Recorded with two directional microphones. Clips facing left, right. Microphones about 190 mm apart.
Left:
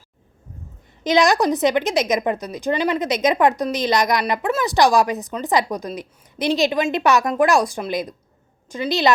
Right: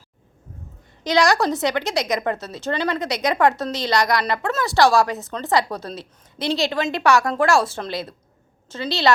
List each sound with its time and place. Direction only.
1.0 s a woman's voice: 20° left (ahead or behind)